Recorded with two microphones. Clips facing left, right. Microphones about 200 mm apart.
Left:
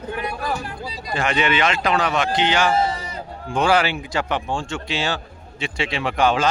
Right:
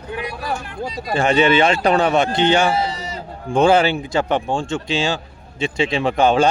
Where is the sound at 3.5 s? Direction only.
25° right (ahead or behind).